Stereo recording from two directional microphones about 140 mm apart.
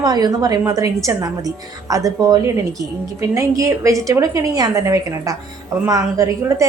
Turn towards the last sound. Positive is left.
turn(degrees=-25)  # may be behind; listen again after turning